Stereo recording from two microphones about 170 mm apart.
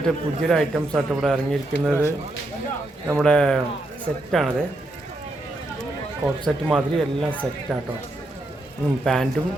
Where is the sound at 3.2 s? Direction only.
5° left (ahead or behind).